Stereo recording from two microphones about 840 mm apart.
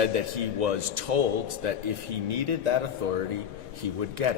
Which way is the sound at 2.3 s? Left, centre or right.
Right.